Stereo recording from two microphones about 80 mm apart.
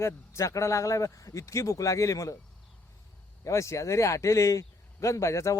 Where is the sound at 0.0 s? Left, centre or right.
Left.